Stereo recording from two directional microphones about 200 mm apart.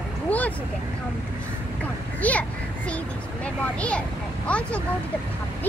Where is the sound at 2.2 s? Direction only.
5° left (ahead or behind).